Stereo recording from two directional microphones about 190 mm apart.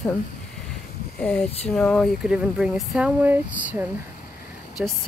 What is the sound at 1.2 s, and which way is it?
Speech, 5° left (ahead or behind).